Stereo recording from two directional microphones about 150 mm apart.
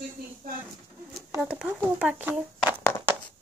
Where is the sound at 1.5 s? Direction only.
10° right (ahead or behind).